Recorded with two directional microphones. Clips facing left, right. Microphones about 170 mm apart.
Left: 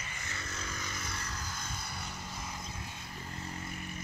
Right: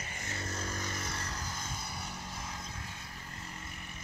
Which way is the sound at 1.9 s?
10° right (ahead or behind).